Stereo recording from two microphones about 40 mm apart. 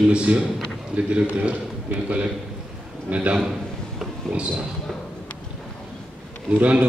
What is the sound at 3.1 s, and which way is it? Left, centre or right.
A man's voice, right.